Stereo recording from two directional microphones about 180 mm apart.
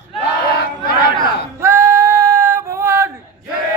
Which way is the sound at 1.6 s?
15° right (ahead or behind).